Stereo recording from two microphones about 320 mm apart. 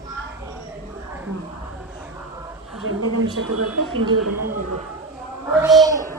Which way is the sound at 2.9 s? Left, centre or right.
Right.